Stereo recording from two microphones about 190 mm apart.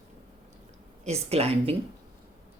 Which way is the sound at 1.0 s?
35° right (ahead or behind).